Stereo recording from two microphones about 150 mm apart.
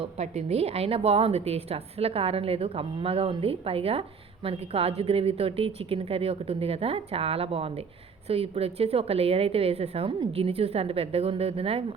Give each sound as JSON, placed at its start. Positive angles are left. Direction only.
{"t": 0.0, "sound": "a woman's voice", "side_deg": -45}